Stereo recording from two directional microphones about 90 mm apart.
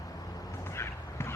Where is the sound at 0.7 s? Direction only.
30° left (ahead or behind).